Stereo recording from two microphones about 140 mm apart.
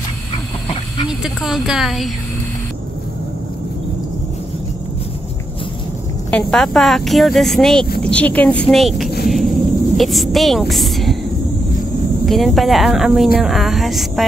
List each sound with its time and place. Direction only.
1.2 s speech: 5° right (ahead or behind)
6.3 s speech: 5° left (ahead or behind)
9.2 s a sound: centre (ahead or behind)
9.9 s speech: centre (ahead or behind)
12.3 s speech: centre (ahead or behind)